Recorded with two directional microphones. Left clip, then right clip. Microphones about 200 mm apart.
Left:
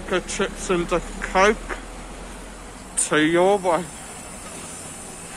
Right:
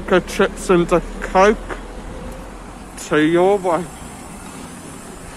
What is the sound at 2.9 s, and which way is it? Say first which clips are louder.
Speech: right 3 dB; 5° right (ahead or behind).